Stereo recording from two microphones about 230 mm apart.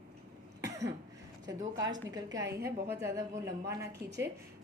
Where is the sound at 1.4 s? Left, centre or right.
Centre.